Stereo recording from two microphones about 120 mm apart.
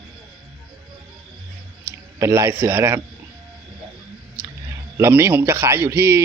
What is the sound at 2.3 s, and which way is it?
Speech, 20° right (ahead or behind).